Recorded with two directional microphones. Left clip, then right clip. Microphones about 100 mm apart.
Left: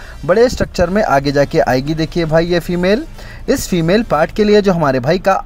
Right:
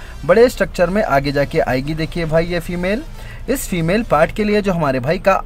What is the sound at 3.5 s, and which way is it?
Speech, 30° left (ahead or behind).